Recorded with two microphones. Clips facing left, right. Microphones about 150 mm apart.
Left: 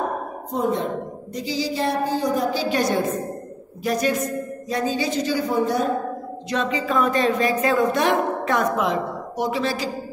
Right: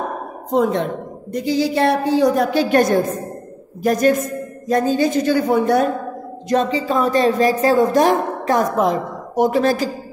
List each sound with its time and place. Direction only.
0.5 s a woman's voice: 85° right
1.3 s a woman's voice: 55° right (ahead or behind)
6.5 s a woman's voice: 35° right (ahead or behind)